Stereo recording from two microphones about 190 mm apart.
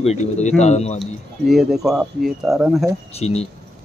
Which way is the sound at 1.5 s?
Centre (ahead or behind).